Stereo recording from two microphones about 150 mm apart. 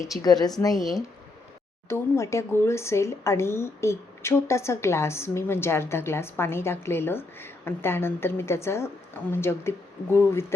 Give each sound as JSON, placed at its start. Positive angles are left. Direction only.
{"t": 0.0, "sound": "speech", "side_deg": 25}
{"t": 0.8, "sound": "speech", "side_deg": 0}
{"t": 1.9, "sound": "speech", "side_deg": 20}